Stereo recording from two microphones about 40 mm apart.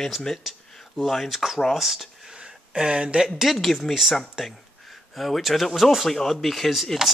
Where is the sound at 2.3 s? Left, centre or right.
Right.